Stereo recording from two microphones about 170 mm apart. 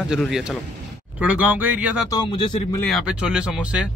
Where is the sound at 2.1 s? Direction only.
25° left (ahead or behind).